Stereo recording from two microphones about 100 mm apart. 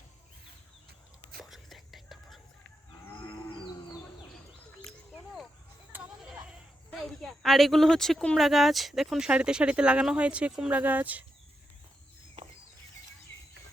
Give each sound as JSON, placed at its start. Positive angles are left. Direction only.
{"t": 1.4, "sound": "whispering", "side_deg": 0}
{"t": 3.0, "sound": "moo", "side_deg": 20}
{"t": 5.1, "sound": "a sound", "side_deg": 0}
{"t": 5.9, "sound": "bleat", "side_deg": -20}
{"t": 6.9, "sound": "speech", "side_deg": 5}